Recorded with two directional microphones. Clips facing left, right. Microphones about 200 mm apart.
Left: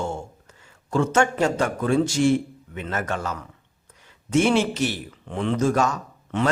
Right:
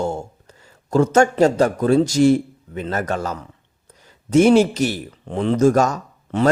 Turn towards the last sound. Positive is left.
turn(degrees=-40)  # may be behind; listen again after turning